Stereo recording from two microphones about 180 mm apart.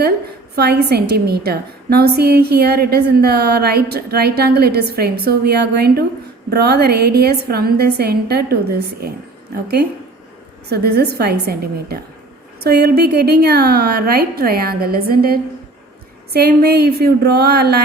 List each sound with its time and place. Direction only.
0.5 s a woman's voice: 60° right (ahead or behind)
10.7 s a woman's voice: 65° right (ahead or behind)